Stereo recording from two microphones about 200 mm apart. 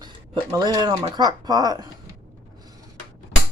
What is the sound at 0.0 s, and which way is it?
Speech, 20° right (ahead or behind).